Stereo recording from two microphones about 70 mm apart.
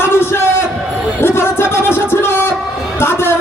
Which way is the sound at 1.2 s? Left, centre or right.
Left.